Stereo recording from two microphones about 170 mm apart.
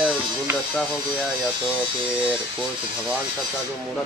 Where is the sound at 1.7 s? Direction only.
5° right (ahead or behind).